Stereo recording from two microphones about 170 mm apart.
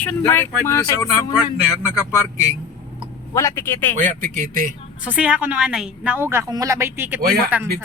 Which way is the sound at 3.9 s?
50° right (ahead or behind).